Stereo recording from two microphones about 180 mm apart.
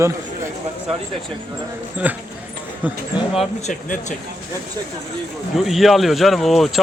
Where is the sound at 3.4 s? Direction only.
40° left (ahead or behind).